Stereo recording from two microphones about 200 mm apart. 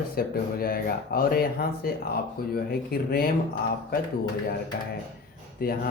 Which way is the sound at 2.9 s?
50° left (ahead or behind).